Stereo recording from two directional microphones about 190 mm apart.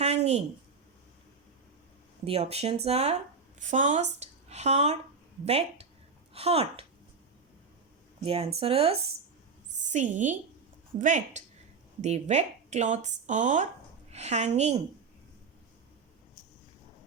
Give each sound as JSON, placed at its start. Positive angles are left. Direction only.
{"t": 0.0, "sound": "a sound", "side_deg": -35}
{"t": 2.2, "sound": "speech", "side_deg": -30}
{"t": 8.2, "sound": "a woman's voice", "side_deg": -30}